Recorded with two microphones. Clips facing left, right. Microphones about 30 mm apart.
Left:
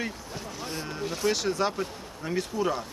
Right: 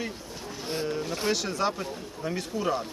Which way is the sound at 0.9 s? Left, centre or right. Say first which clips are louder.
Left 1 dB; centre.